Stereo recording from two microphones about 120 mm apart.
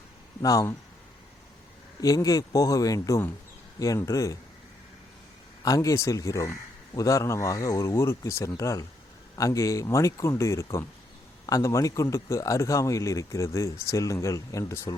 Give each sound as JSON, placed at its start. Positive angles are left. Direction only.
{"t": 0.4, "sound": "a man's voice", "side_deg": 25}
{"t": 2.0, "sound": "a man's voice", "side_deg": 30}
{"t": 5.6, "sound": "a man's voice", "side_deg": 30}